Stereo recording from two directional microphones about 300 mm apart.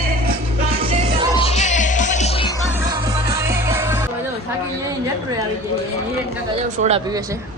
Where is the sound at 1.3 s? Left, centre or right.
Left.